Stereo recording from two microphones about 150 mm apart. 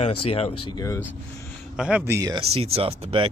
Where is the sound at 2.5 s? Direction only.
40° right (ahead or behind).